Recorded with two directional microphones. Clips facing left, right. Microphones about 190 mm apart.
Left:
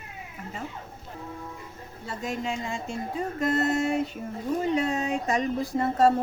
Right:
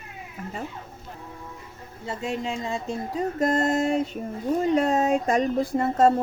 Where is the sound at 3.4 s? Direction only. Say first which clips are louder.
Right 2 dB; 45° right (ahead or behind).